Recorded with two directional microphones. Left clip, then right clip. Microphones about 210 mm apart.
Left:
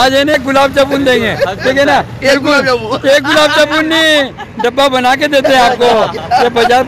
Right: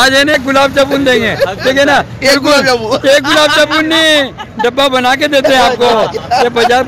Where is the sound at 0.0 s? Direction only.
5° left (ahead or behind).